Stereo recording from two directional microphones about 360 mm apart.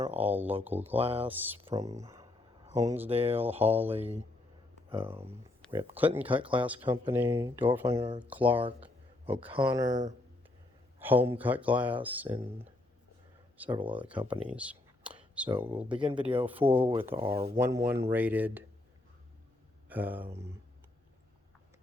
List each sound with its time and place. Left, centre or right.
0.2 s speech: centre
0.8 s speech: centre
1.3 s speech: centre
3.6 s speech: centre
3.9 s speech: centre
13.6 s speech: centre
19.9 s speech: centre